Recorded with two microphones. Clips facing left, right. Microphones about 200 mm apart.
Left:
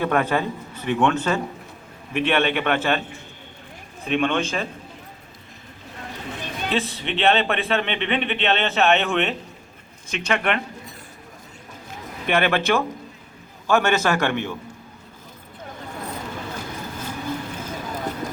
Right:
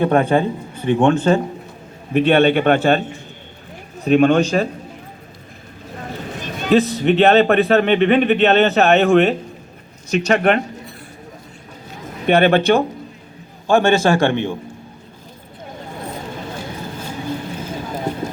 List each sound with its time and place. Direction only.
0.0 s speech: 30° right (ahead or behind)
6.6 s speech: 40° right (ahead or behind)
12.2 s a man's voice: 35° right (ahead or behind)
17.7 s vehicle: 30° right (ahead or behind)